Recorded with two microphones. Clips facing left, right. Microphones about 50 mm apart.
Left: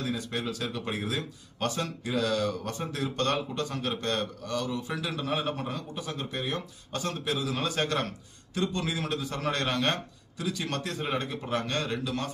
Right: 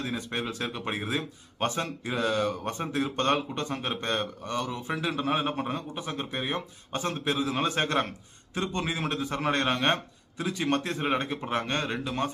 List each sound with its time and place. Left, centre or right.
0.0 s speech: right